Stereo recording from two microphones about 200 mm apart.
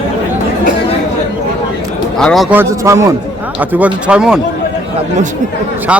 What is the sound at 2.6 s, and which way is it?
Speech, 15° right (ahead or behind).